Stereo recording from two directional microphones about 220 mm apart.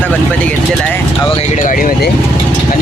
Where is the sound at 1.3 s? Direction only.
30° left (ahead or behind).